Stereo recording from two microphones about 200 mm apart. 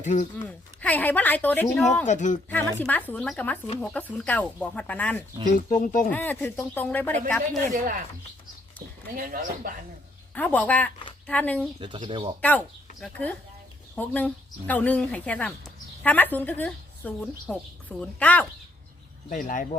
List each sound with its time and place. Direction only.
0.0 s speech: 40° left (ahead or behind)
0.4 s speech: 10° left (ahead or behind)
2.0 s speech: 40° left (ahead or behind)
2.5 s speech: 10° left (ahead or behind)
5.5 s speech: 40° left (ahead or behind)
6.1 s speech: 10° left (ahead or behind)
9.1 s speech: 45° right (ahead or behind)
10.3 s speech: 5° left (ahead or behind)
11.8 s speech: 25° right (ahead or behind)
12.4 s speech: 5° left (ahead or behind)
19.3 s speech: 40° left (ahead or behind)